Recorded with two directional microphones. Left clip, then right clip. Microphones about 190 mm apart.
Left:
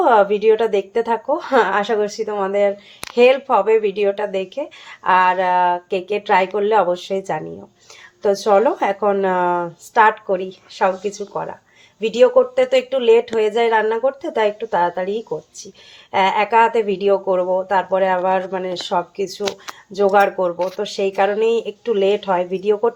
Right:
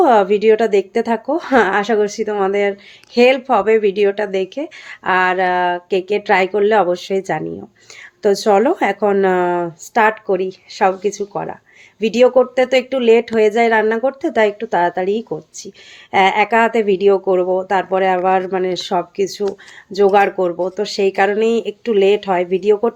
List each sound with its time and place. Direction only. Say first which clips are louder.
0.0 s speech: right 2 dB; 50° right (ahead or behind)